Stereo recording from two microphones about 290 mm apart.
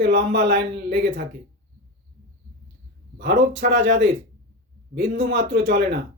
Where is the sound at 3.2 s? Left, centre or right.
Right.